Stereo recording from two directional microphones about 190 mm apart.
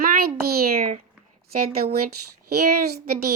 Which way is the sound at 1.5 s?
55° right (ahead or behind).